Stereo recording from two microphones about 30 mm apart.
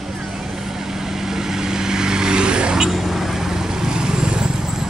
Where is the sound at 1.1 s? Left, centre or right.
Centre; by 2.7 s right.